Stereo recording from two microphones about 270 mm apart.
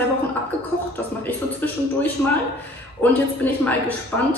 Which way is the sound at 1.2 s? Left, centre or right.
Centre.